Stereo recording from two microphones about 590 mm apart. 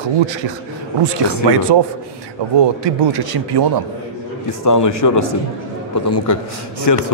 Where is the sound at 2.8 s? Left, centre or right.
Right.